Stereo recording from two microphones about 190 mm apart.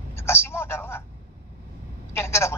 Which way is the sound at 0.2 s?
10° left (ahead or behind).